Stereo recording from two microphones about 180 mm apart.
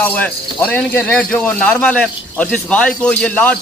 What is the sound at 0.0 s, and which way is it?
A man's voice, 10° left (ahead or behind).